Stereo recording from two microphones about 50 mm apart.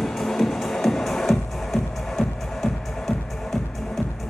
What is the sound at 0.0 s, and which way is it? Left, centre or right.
Music, centre.